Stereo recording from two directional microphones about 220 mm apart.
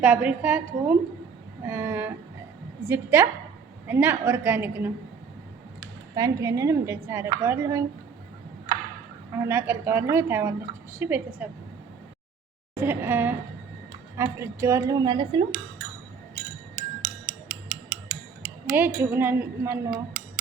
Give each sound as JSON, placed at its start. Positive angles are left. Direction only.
{"t": 0.0, "sound": "a woman's voice", "side_deg": -5}
{"t": 6.1, "sound": "a woman's voice", "side_deg": -15}
{"t": 9.5, "sound": "a woman's voice", "side_deg": -10}
{"t": 12.7, "sound": "a woman's voice", "side_deg": -10}
{"t": 16.7, "sound": "music", "side_deg": -60}
{"t": 18.7, "sound": "a woman's voice", "side_deg": -10}
{"t": 19.9, "sound": "a sound", "side_deg": -40}